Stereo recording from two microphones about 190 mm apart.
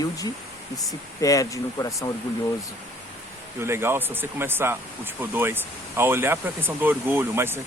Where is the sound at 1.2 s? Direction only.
15° left (ahead or behind).